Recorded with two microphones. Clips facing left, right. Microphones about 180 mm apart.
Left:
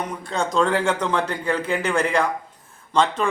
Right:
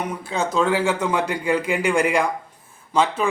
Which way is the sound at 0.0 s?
5° right (ahead or behind).